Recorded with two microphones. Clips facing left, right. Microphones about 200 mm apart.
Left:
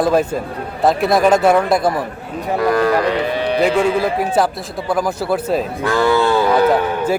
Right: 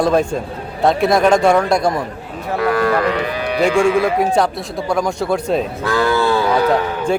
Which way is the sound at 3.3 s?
30° left (ahead or behind).